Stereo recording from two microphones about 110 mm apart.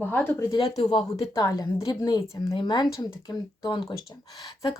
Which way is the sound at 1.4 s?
35° left (ahead or behind).